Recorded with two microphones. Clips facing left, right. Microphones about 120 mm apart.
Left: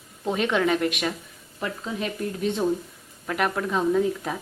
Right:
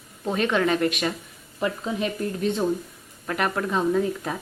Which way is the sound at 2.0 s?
Centre (ahead or behind).